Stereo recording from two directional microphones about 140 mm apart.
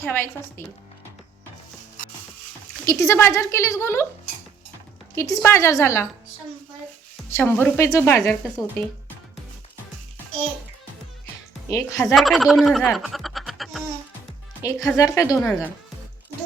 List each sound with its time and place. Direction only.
0.0 s a woman's voice: 15° left (ahead or behind)
2.8 s speech: 20° left (ahead or behind)
5.1 s speech: 20° left (ahead or behind)
7.3 s speech: 20° left (ahead or behind)
11.7 s speech: 20° left (ahead or behind)
12.0 s speech: centre (ahead or behind)
14.6 s speech: 25° left (ahead or behind)